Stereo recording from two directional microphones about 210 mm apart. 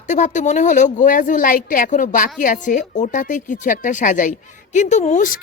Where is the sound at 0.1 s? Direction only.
35° left (ahead or behind).